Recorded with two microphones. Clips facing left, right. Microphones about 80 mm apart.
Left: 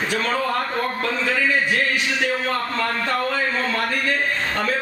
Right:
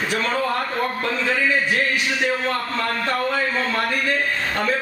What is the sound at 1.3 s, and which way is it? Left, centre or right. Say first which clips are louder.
Speech: even; centre.